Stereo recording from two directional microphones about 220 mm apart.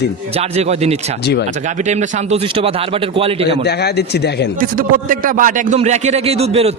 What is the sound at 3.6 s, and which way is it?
Speech, 50° left (ahead or behind).